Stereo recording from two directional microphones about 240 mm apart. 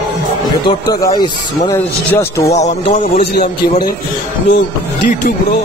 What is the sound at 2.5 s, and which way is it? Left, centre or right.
Music, left.